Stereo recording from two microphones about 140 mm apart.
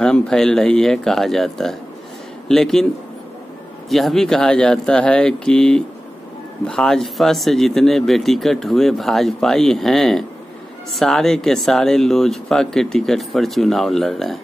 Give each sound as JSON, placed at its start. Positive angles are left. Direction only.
{"t": 0.0, "sound": "speech", "side_deg": 5}
{"t": 3.9, "sound": "speech", "side_deg": 0}